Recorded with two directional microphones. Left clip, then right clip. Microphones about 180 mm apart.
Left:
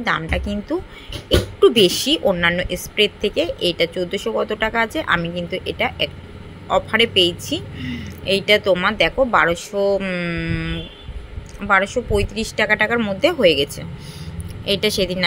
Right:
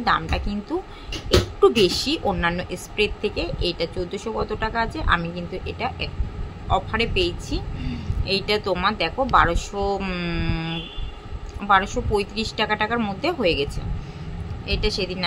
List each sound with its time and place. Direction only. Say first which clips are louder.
0.0 s a woman's voice: left 1 dB; 10° left (ahead or behind)